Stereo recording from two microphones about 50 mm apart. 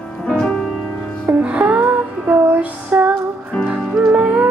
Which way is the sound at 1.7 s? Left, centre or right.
Right.